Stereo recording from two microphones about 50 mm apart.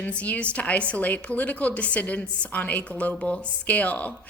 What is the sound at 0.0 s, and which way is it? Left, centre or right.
A woman's voice, left.